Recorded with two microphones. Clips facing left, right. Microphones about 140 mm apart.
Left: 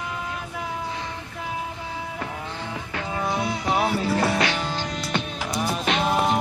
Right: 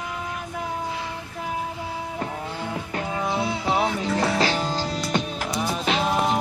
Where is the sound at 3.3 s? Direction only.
25° right (ahead or behind).